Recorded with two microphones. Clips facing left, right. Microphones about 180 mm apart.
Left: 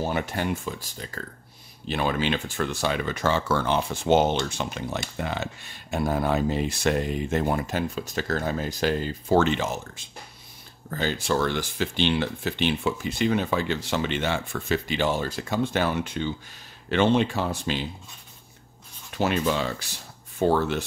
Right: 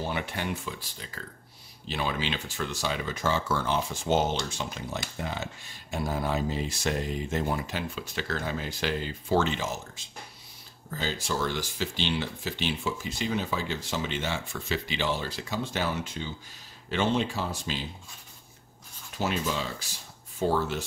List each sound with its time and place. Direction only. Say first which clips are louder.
0.0 s speech: left 5 dB; 45° left (ahead or behind); by 17.7 s 60° left (ahead or behind)
19.1 s speech: left 6 dB; 60° left (ahead or behind)